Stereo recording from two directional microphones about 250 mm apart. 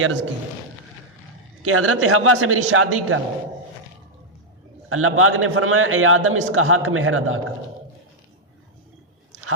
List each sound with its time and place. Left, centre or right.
0.0 s a man's voice: right
1.6 s a man's voice: right
4.9 s a man's voice: right